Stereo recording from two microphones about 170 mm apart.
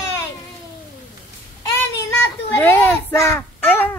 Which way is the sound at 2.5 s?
10° left (ahead or behind).